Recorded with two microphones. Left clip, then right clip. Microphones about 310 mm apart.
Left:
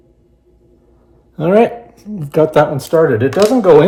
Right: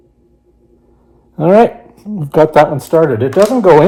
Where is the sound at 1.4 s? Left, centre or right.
Centre.